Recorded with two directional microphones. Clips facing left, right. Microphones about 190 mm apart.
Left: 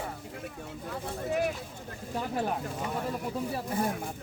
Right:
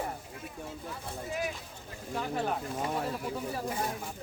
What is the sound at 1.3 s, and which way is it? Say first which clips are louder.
Speech: left 6 dB; 60° left (ahead or behind).